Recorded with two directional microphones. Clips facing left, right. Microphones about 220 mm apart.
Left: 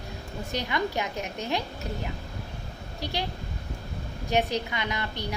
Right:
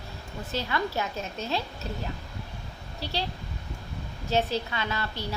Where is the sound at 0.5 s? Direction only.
15° left (ahead or behind).